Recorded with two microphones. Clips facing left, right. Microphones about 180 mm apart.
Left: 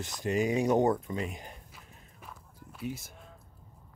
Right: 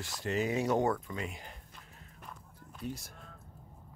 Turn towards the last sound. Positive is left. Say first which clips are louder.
# left 3 dB
turn(degrees=5)  # may be behind; listen again after turning